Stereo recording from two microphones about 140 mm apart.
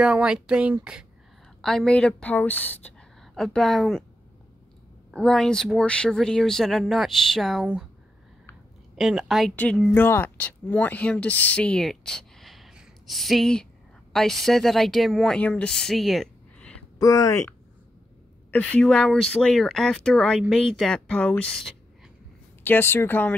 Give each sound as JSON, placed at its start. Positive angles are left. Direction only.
{"t": 0.0, "sound": "a woman's voice", "side_deg": -5}
{"t": 3.2, "sound": "a woman's voice", "side_deg": 0}
{"t": 5.1, "sound": "speech", "side_deg": 5}
{"t": 8.9, "sound": "speech", "side_deg": 0}
{"t": 17.0, "sound": "speech", "side_deg": 25}
{"t": 18.5, "sound": "a woman's voice", "side_deg": 10}